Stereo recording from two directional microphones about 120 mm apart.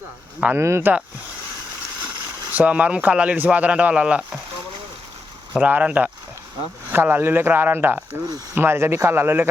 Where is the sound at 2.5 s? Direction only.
10° right (ahead or behind).